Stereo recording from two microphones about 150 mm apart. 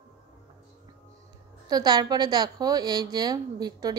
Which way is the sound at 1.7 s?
25° right (ahead or behind).